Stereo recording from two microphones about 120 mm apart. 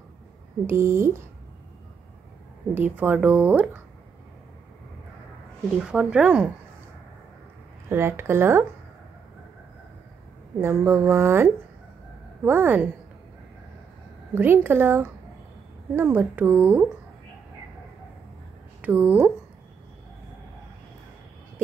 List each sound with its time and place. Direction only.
0.7 s speech: 20° right (ahead or behind)
2.7 s speech: 15° right (ahead or behind)
5.7 s speech: 5° right (ahead or behind)
7.9 s speech: 20° right (ahead or behind)
10.6 s speech: 20° right (ahead or behind)
14.3 s speech: 15° right (ahead or behind)
18.8 s a woman's voice: 15° right (ahead or behind)